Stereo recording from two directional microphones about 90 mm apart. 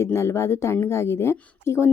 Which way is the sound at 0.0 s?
30° left (ahead or behind).